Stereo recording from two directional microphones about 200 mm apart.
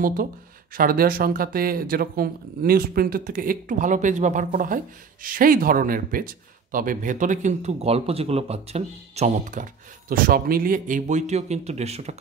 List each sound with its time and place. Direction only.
0.7 s speech: 45° right (ahead or behind)